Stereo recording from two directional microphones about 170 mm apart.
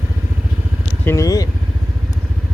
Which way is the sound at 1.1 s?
20° left (ahead or behind).